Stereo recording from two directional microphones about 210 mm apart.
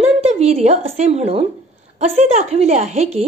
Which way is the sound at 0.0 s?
30° right (ahead or behind).